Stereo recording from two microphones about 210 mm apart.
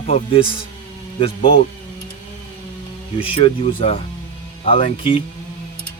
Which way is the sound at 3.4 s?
25° left (ahead or behind).